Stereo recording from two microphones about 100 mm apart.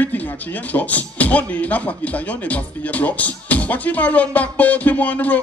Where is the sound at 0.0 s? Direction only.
15° left (ahead or behind).